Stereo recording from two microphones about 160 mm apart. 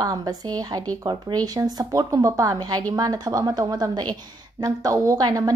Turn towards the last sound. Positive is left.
turn(degrees=-25)  # may be behind; listen again after turning